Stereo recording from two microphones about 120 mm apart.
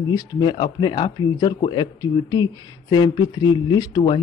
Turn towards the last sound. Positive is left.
turn(degrees=40)  # may be behind; listen again after turning